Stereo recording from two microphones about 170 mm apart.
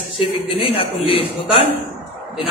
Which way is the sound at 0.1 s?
35° left (ahead or behind).